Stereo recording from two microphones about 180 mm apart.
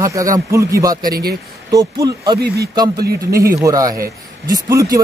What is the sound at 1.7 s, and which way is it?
Speech, 20° right (ahead or behind).